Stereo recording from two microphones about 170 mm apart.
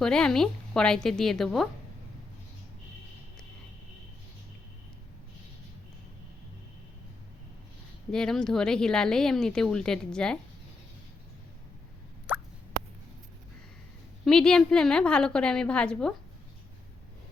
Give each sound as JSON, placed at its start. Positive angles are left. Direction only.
{"t": 0.0, "sound": "speech", "side_deg": 5}
{"t": 8.1, "sound": "speech", "side_deg": 5}
{"t": 14.3, "sound": "speech", "side_deg": 5}